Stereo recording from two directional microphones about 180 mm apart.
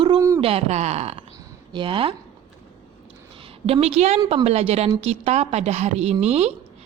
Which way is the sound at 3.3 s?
30° right (ahead or behind).